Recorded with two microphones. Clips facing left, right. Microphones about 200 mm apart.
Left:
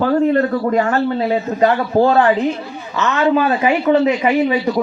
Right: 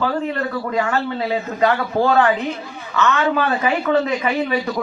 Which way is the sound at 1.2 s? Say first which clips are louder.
Left 1 dB; 25° left (ahead or behind).